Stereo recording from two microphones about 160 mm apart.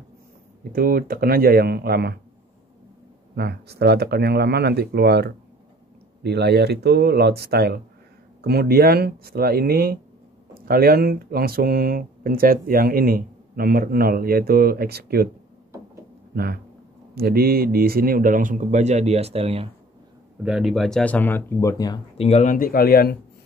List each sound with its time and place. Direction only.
0.7 s speech: 65° right (ahead or behind); by 2.1 s 80° right
3.3 s speech: 85° right
8.5 s speech: 75° right (ahead or behind)
16.3 s speech: 75° right (ahead or behind); by 19.7 s 40° right (ahead or behind)
20.4 s speech: 5° right (ahead or behind); by 22.0 s 25° left (ahead or behind)
22.1 s speech: 40° left (ahead or behind); by 23.1 s 70° left (ahead or behind)